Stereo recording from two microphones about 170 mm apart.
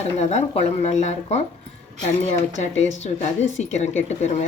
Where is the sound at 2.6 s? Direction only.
40° left (ahead or behind).